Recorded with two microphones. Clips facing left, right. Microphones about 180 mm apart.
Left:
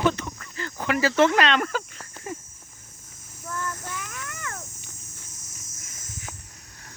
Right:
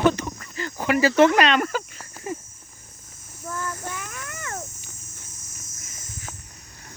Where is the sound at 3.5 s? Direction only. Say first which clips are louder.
Right 1 dB; 5° right (ahead or behind).